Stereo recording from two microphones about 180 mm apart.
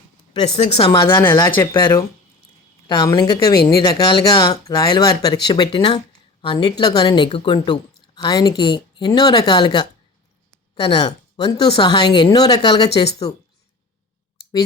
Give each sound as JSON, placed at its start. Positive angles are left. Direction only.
{"t": 0.5, "sound": "speech", "side_deg": 35}
{"t": 1.0, "sound": "a woman's voice", "side_deg": 10}